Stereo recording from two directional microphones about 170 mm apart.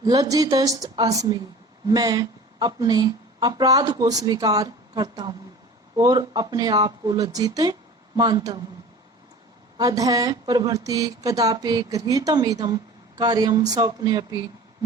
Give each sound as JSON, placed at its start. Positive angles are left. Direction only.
{"t": 0.0, "sound": "speech", "side_deg": -20}
{"t": 9.7, "sound": "speech", "side_deg": -20}